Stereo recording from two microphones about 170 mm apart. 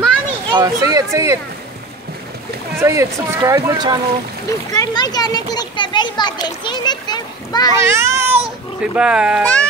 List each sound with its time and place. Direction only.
0.5 s speech: 25° right (ahead or behind)
2.8 s speech: 15° right (ahead or behind)
4.5 s a child's voice: 20° left (ahead or behind)
7.8 s a child's voice: 15° right (ahead or behind)
9.4 s speech: 10° left (ahead or behind)